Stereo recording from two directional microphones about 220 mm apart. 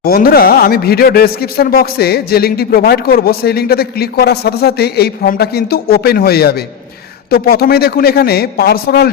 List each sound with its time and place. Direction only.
0.0 s speech: 40° left (ahead or behind)